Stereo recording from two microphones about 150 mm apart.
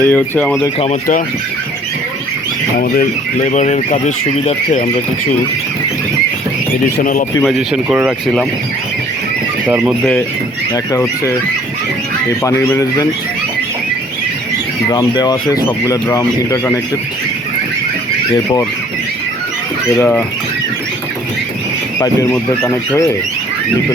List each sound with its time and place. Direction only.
0.0 s speech: 10° left (ahead or behind)
2.7 s speech: 70° left (ahead or behind)
6.9 s speech: 65° left (ahead or behind)
7.4 s speech: 5° right (ahead or behind)
9.6 s speech: 15° right (ahead or behind)
10.0 s speech: 10° left (ahead or behind)
12.4 s speech: 20° left (ahead or behind)
14.8 s speech: 25° left (ahead or behind)
20.0 s speech: 10° left (ahead or behind)
21.9 s speech: 20° left (ahead or behind)